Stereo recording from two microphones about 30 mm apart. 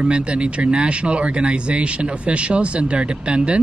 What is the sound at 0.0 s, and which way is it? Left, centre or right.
Speech, right.